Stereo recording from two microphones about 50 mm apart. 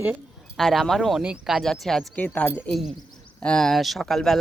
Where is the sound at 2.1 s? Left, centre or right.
Left.